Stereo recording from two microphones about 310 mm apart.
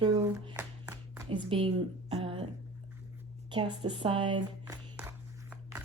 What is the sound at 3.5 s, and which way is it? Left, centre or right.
Speech, centre.